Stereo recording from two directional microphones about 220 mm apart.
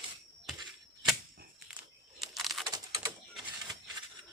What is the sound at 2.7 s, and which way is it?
Typing, 20° right (ahead or behind).